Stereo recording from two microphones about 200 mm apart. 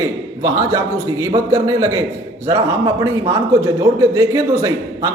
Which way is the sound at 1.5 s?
15° right (ahead or behind).